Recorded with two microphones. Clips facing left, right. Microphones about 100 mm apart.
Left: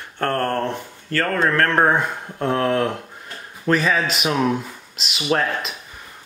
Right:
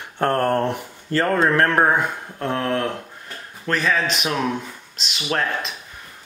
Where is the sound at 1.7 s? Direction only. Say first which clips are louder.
Even; centre (ahead or behind).